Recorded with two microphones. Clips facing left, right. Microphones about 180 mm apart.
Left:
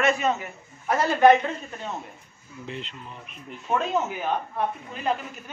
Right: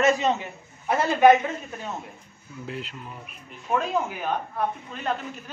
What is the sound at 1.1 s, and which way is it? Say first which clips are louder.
Speech: right 1 dB; 10° right (ahead or behind).